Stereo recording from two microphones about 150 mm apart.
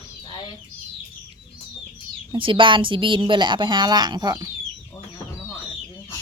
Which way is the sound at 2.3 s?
35° right (ahead or behind).